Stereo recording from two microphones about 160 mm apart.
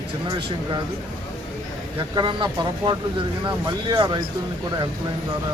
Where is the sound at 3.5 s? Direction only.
25° right (ahead or behind).